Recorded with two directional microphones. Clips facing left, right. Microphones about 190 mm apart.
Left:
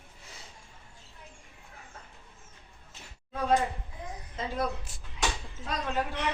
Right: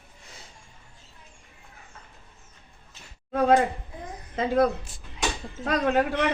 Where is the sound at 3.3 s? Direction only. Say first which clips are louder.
Right 7 dB; 75° right (ahead or behind).